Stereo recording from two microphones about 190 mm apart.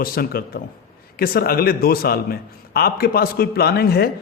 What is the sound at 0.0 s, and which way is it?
Speech, 50° left (ahead or behind).